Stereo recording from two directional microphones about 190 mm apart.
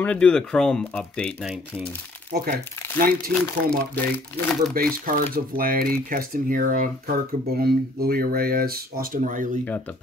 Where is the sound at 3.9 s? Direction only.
5° left (ahead or behind).